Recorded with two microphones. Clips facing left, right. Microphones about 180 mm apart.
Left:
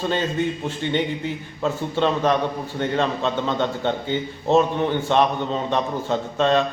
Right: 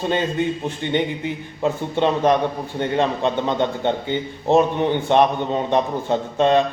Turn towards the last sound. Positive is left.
turn(degrees=-15)  # may be behind; listen again after turning